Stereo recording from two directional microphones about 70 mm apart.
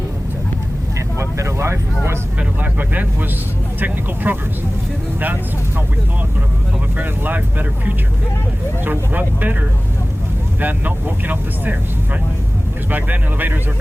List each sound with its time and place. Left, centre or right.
1.2 s vehicle: right
2.4 s speech: right
6.9 s speech: right
12.9 s speech: right